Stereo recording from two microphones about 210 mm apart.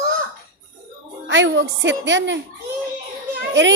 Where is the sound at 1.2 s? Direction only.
60° right (ahead or behind).